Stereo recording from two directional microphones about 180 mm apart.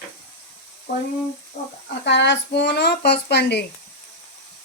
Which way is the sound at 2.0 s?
75° left (ahead or behind).